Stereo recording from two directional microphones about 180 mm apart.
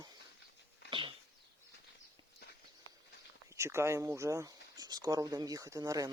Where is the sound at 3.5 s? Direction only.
15° right (ahead or behind).